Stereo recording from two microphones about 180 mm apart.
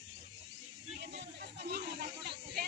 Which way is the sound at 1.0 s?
70° right (ahead or behind).